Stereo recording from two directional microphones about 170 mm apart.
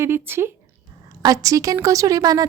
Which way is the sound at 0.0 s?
15° right (ahead or behind).